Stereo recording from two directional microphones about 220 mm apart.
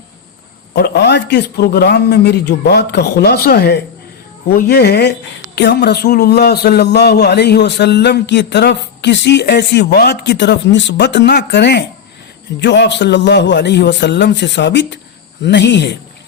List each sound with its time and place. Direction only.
0.7 s speech: 50° left (ahead or behind)